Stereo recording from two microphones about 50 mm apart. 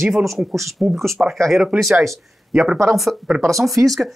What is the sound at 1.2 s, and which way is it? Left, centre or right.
Speech, right.